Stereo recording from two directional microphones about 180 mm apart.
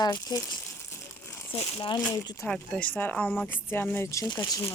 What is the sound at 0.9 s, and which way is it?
Crumpling, 15° left (ahead or behind).